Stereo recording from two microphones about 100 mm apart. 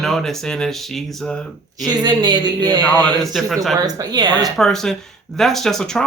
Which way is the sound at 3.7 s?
40° right (ahead or behind).